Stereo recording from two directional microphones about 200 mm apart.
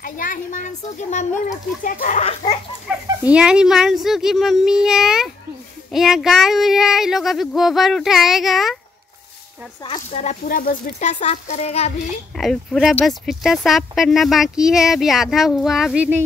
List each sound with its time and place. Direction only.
0.0 s speech: 40° left (ahead or behind)
3.3 s speech: 5° right (ahead or behind)
9.9 s speech: 35° left (ahead or behind)
12.4 s speech: centre (ahead or behind)